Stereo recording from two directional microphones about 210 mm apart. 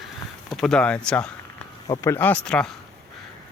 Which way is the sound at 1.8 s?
15° left (ahead or behind).